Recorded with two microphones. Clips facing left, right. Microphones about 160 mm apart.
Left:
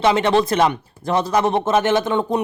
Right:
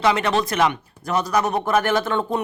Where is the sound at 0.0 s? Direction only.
25° left (ahead or behind).